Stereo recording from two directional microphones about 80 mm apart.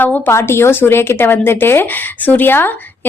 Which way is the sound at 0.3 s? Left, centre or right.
Left.